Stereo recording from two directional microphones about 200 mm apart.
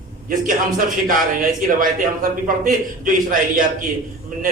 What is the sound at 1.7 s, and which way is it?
A man's voice, 45° right (ahead or behind).